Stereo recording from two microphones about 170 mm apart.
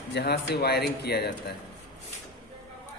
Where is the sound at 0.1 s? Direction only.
75° left (ahead or behind).